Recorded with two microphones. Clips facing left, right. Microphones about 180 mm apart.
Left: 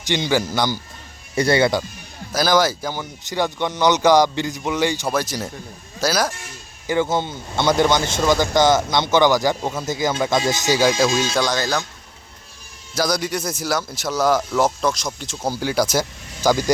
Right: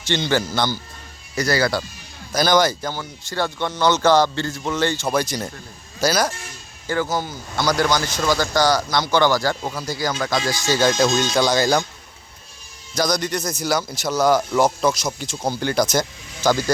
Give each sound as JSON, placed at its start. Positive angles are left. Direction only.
{"t": 0.1, "sound": "speech", "side_deg": 10}
{"t": 1.4, "sound": "speech", "side_deg": 25}
{"t": 2.3, "sound": "a man's voice", "side_deg": 5}
{"t": 6.8, "sound": "speech", "side_deg": 20}
{"t": 10.8, "sound": "speech", "side_deg": 10}
{"t": 11.4, "sound": "speech", "side_deg": -10}
{"t": 12.9, "sound": "a man's voice", "side_deg": 5}